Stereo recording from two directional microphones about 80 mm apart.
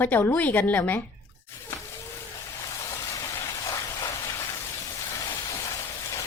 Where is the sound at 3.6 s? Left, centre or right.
Left.